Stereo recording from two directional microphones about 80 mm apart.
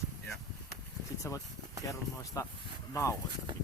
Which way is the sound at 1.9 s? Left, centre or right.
Left.